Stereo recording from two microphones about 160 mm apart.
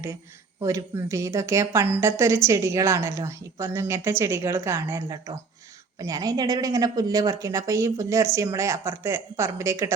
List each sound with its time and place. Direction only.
0.6 s a woman's voice: 20° right (ahead or behind)